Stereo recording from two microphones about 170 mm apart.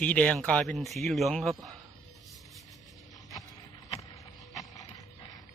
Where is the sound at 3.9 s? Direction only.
20° left (ahead or behind).